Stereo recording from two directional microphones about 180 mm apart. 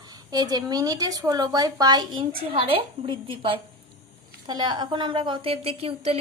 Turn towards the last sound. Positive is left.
turn(degrees=-35)  # may be behind; listen again after turning